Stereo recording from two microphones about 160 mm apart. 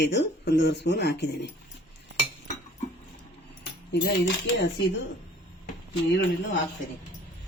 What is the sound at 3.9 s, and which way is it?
Speech, 90° left.